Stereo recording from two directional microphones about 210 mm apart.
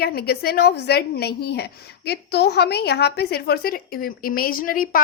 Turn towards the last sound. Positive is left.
turn(degrees=40)  # may be behind; listen again after turning